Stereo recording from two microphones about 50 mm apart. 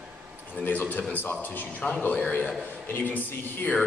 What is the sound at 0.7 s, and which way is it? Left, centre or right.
A man's voice, left.